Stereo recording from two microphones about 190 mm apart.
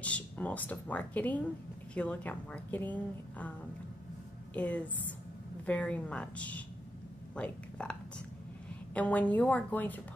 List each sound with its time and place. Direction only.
0.0 s a woman's voice: 5° left (ahead or behind)
4.6 s a woman's voice: 10° left (ahead or behind)